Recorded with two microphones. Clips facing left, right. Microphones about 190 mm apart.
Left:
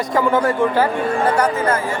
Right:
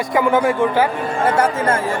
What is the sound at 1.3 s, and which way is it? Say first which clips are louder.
Speech: even; 25° right (ahead or behind).